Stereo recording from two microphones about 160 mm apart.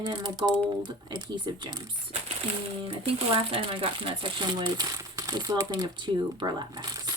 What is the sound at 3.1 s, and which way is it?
Speech, 35° right (ahead or behind).